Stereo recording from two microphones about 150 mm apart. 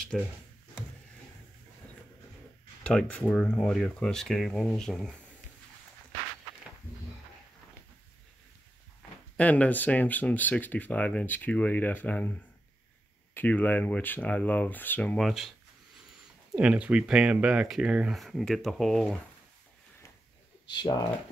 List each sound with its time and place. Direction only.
0.1 s speech: centre (ahead or behind)
2.8 s speech: 5° left (ahead or behind)
9.4 s speech: 10° left (ahead or behind)
20.7 s speech: 25° left (ahead or behind)